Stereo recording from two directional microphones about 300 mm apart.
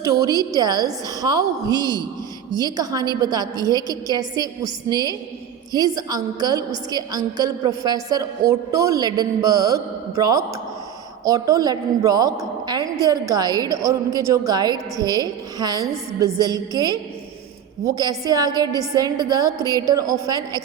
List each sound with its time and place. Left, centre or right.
0.0 s a woman's voice: centre